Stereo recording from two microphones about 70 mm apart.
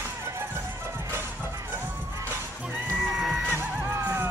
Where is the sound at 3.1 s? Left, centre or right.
Centre.